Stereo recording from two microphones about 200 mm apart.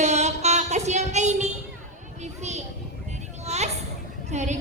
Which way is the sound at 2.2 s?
35° right (ahead or behind).